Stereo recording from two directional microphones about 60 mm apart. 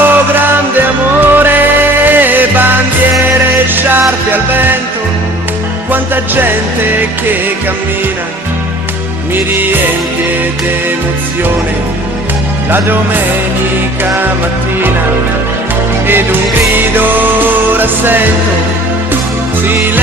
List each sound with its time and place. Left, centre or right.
0.0 s music: right
5.9 s music: right
9.3 s music: right
16.0 s music: right